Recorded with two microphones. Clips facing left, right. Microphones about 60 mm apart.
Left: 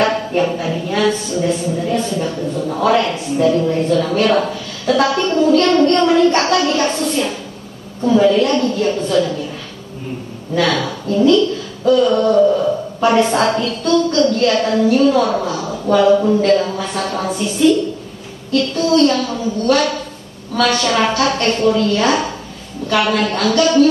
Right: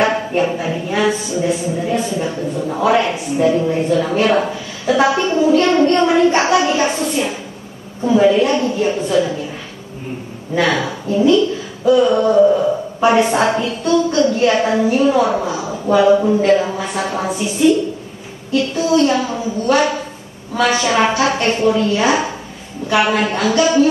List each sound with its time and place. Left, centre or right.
0.0 s a woman's voice: centre
10.5 s a woman's voice: centre